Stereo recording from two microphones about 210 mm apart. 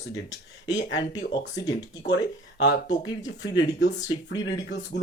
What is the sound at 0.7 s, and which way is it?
Speech, 60° left (ahead or behind).